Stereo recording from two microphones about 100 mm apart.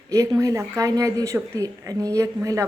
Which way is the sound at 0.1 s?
30° right (ahead or behind).